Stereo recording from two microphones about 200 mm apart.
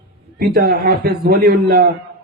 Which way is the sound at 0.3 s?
50° right (ahead or behind).